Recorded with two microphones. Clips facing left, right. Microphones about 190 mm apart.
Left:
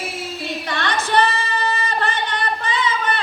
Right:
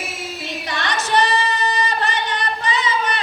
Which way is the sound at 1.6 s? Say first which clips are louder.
Right 2 dB; 20° right (ahead or behind).